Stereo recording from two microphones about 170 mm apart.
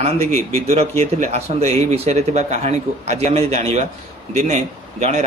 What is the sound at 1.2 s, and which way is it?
Speech, 40° right (ahead or behind).